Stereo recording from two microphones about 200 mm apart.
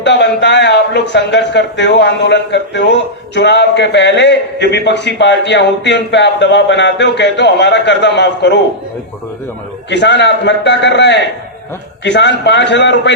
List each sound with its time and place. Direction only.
0.0 s a man's voice: 60° left (ahead or behind)
9.9 s a man's voice: 60° left (ahead or behind)